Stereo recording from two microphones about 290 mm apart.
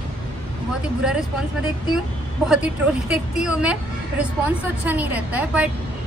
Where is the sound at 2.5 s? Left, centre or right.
Centre.